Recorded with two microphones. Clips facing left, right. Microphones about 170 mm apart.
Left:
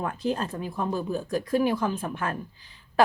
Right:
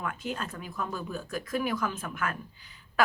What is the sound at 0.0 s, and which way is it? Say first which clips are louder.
Speech: left 7 dB; 35° left (ahead or behind).